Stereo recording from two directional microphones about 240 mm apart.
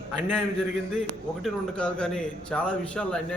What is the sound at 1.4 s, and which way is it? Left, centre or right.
A man's voice, centre.